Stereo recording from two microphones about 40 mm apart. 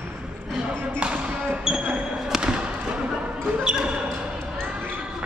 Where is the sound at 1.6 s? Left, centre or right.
Right.